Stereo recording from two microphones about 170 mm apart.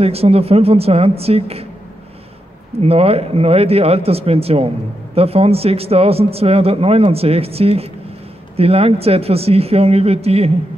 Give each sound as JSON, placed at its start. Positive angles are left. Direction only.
{"t": 0.0, "sound": "a man's voice", "side_deg": -35}
{"t": 2.8, "sound": "a man's voice", "side_deg": -35}